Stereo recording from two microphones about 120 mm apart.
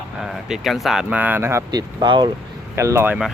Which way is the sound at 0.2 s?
5° right (ahead or behind).